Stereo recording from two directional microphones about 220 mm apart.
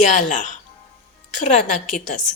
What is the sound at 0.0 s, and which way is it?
A woman's voice, 35° left (ahead or behind).